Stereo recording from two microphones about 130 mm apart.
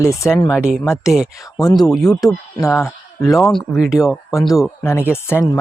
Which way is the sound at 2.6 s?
20° left (ahead or behind).